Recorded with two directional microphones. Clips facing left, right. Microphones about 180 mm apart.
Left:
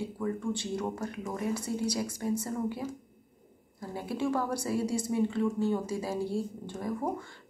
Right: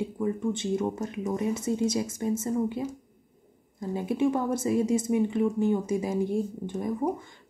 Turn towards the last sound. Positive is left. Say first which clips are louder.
# right 4 dB
turn(degrees=-20)  # may be behind; listen again after turning